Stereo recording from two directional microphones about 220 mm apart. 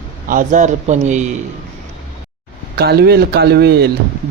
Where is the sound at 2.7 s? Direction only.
45° right (ahead or behind).